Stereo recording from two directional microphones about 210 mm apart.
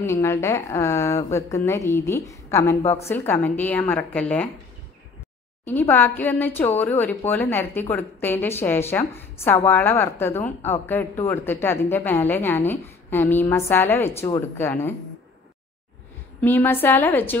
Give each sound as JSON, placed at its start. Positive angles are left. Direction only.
{"t": 0.0, "sound": "a woman's voice", "side_deg": 10}
{"t": 2.8, "sound": "a woman's voice", "side_deg": 30}
{"t": 3.1, "sound": "a woman's voice", "side_deg": 10}
{"t": 5.7, "sound": "a woman's voice", "side_deg": 10}
{"t": 16.3, "sound": "a woman's voice", "side_deg": 10}